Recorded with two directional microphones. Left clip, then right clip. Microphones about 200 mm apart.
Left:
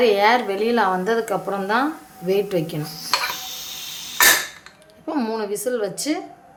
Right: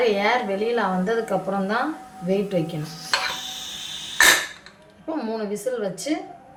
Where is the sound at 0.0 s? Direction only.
50° left (ahead or behind).